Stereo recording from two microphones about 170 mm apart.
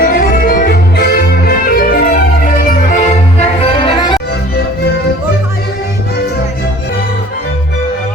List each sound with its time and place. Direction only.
0.0 s music: 60° left (ahead or behind); by 4.2 s 25° left (ahead or behind)